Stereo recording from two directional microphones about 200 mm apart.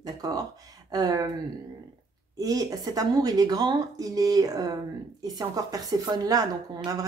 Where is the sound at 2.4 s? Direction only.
20° right (ahead or behind).